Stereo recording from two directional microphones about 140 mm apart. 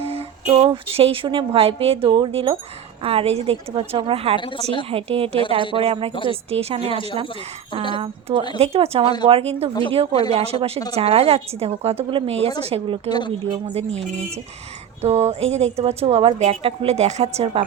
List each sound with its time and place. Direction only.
0.0 s speech: 45° right (ahead or behind)
4.4 s a woman's voice: 35° left (ahead or behind)
4.9 s a woman's voice: 45° right (ahead or behind)
6.9 s a woman's voice: 40° left (ahead or behind)
7.9 s a woman's voice: 40° right (ahead or behind)
13.1 s a woman's voice: 30° left (ahead or behind)
13.4 s a woman's voice: 45° right (ahead or behind)
15.0 s a woman's voice: 50° right (ahead or behind)